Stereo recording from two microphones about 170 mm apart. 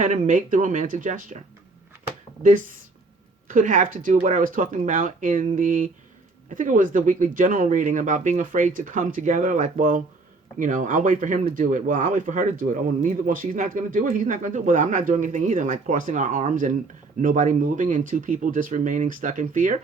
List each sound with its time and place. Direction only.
0.0 s speech: 50° right (ahead or behind)
2.4 s speech: 50° right (ahead or behind)